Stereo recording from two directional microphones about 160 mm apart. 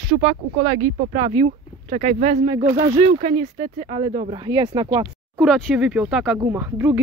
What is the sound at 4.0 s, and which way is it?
Speech, 30° right (ahead or behind).